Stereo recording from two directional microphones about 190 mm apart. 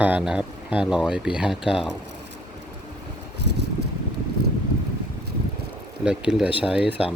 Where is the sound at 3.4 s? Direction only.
65° right (ahead or behind).